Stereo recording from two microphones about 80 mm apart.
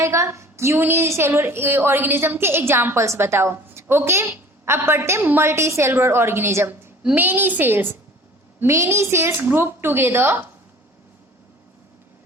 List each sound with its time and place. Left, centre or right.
0.0 s a woman's voice: right
8.6 s a woman's voice: right